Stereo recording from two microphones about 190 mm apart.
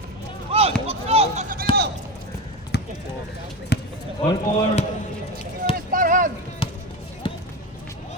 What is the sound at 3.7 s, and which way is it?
Basketball bounce, 60° left (ahead or behind).